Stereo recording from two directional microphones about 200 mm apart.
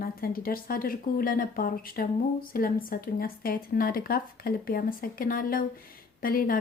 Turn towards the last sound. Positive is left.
turn(degrees=45)  # may be behind; listen again after turning